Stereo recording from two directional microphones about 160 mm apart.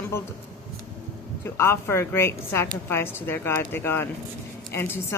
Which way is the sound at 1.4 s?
15° left (ahead or behind).